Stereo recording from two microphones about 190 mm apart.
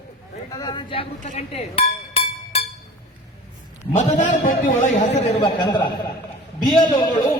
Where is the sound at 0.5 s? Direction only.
20° left (ahead or behind).